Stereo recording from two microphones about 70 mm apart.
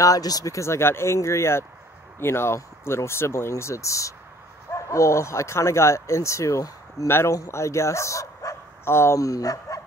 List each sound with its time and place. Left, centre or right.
0.0 s speech: left
0.6 s speech: left
7.1 s speech: left
8.8 s speech: left
9.2 s speech: left